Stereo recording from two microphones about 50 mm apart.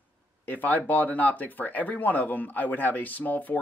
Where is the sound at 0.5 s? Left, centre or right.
Left.